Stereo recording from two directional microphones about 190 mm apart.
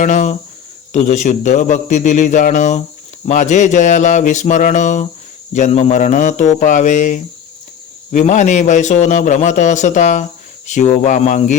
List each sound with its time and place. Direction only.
0.0 s a man's voice: 40° left (ahead or behind)